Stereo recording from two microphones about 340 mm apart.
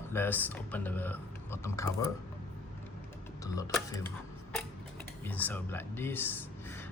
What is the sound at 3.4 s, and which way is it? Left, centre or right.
Speech, centre.